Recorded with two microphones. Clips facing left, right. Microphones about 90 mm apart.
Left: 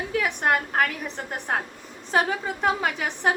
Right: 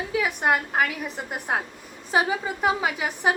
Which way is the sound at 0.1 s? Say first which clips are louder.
Even; 5° right (ahead or behind).